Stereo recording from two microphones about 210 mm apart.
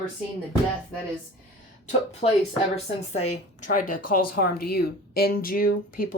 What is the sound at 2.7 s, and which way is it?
A woman's voice, 30° left (ahead or behind).